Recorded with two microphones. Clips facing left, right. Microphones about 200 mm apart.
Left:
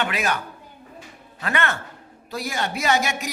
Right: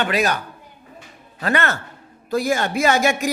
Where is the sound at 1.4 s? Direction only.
35° right (ahead or behind).